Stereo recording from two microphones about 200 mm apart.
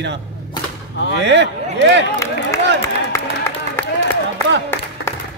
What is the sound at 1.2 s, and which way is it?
Speech, 65° right (ahead or behind).